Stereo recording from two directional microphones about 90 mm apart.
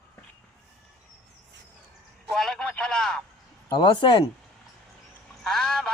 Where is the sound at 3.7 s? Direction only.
55° left (ahead or behind).